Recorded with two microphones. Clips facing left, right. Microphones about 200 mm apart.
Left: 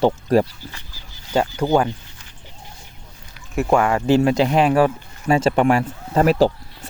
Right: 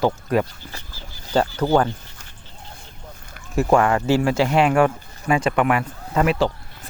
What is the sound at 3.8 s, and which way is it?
Speech, 15° left (ahead or behind).